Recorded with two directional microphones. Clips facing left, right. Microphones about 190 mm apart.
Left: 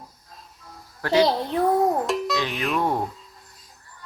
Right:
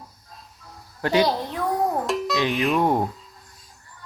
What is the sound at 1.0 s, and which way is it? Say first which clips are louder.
Speech: right 1 dB; 20° right (ahead or behind).